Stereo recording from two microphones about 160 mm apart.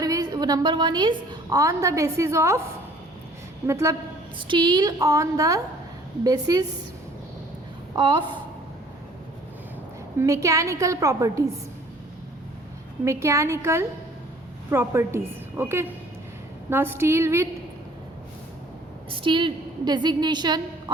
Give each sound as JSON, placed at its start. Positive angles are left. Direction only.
{"t": 0.0, "sound": "a woman's voice", "side_deg": -25}
{"t": 3.7, "sound": "a woman's voice", "side_deg": -20}
{"t": 4.4, "sound": "a woman's voice", "side_deg": -30}
{"t": 7.9, "sound": "a woman's voice", "side_deg": -30}
{"t": 10.2, "sound": "a woman's voice", "side_deg": -20}
{"t": 13.1, "sound": "a woman's voice", "side_deg": -20}
{"t": 19.1, "sound": "a woman's voice", "side_deg": -30}